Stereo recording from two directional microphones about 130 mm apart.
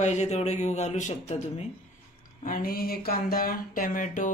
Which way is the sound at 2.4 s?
90° left.